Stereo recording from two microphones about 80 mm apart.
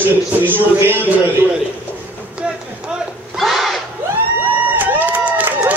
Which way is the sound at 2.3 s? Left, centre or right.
Centre.